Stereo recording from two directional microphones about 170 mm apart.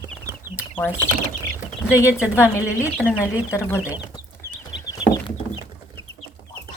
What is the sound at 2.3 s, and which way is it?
Speech, 15° left (ahead or behind).